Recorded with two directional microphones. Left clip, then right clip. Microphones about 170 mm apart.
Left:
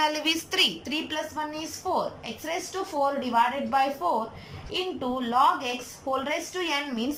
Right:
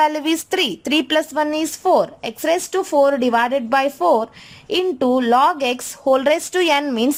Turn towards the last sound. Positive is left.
turn(degrees=-70)  # may be behind; listen again after turning